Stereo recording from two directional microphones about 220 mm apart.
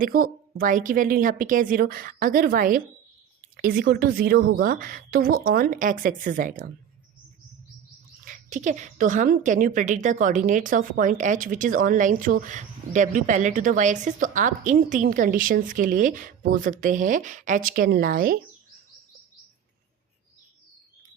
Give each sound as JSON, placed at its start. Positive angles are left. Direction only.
{"t": 0.0, "sound": "a woman's voice", "side_deg": -40}
{"t": 8.2, "sound": "a woman's voice", "side_deg": -35}